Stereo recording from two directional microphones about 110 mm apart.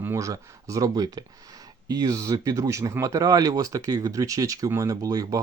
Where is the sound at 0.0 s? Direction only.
25° right (ahead or behind).